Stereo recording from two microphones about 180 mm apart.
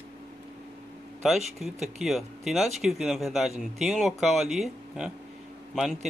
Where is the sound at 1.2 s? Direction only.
Centre (ahead or behind).